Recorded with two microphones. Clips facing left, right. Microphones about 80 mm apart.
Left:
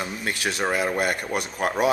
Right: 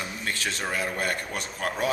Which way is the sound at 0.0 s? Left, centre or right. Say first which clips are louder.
Left 4 dB; centre.